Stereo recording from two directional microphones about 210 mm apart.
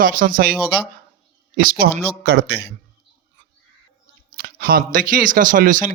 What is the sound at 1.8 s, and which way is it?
Speech, 50° right (ahead or behind).